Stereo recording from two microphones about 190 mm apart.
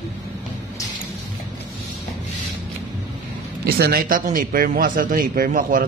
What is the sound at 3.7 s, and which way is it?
A man's voice, 55° right (ahead or behind).